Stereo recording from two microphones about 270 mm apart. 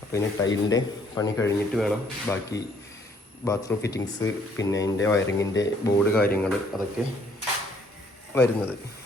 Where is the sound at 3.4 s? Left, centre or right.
Centre.